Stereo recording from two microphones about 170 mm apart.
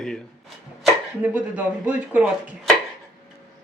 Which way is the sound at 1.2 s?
10° right (ahead or behind).